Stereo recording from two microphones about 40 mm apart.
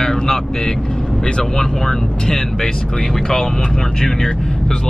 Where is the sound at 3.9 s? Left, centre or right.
Centre.